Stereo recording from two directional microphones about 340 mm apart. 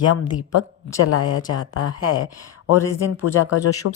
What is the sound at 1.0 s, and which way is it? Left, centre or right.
Speech, left.